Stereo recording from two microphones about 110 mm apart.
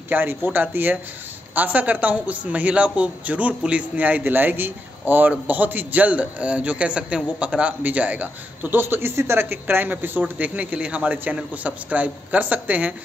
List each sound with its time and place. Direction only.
0.1 s a man's voice: 20° right (ahead or behind)